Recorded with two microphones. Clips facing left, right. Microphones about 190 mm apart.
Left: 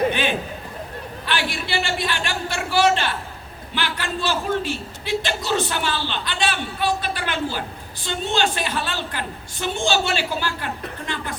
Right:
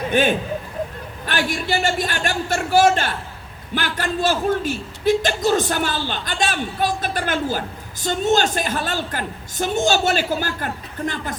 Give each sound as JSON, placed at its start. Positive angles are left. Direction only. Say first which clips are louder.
{"t": 0.1, "sound": "a man's voice", "louder": "right 5 dB", "side_deg": -45}